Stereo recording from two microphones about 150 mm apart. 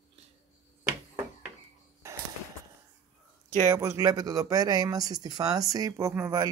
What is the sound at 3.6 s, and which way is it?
Speech, 20° right (ahead or behind).